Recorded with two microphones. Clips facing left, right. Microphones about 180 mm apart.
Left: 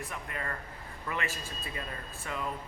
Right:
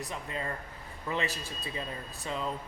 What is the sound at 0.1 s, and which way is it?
Speech, 25° right (ahead or behind).